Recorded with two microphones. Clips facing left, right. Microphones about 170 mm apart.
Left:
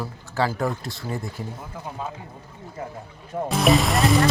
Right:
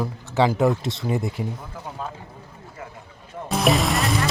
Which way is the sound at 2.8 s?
30° left (ahead or behind).